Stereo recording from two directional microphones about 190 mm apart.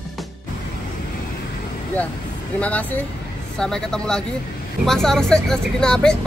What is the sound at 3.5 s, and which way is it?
Speech, 5° left (ahead or behind).